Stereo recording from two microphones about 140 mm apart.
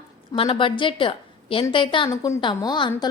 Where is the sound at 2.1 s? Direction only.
25° left (ahead or behind).